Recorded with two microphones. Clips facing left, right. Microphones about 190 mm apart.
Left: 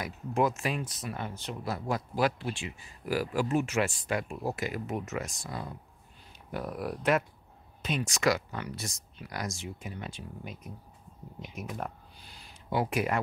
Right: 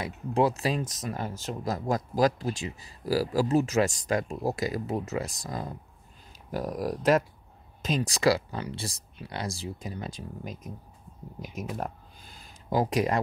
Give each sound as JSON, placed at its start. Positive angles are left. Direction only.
{"t": 0.0, "sound": "speech", "side_deg": -30}